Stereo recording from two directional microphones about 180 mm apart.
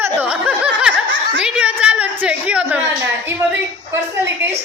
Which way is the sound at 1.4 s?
5° right (ahead or behind).